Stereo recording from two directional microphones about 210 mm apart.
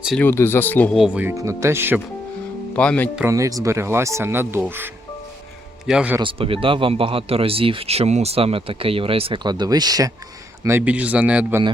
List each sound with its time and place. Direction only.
0.0 s speech: centre (ahead or behind)
0.3 s speech: 10° left (ahead or behind); by 2.0 s 10° right (ahead or behind)
2.7 s speech: 5° left (ahead or behind)
3.2 s speech: 15° right (ahead or behind)
6.1 s speech: 25° right (ahead or behind); by 11.6 s 5° right (ahead or behind)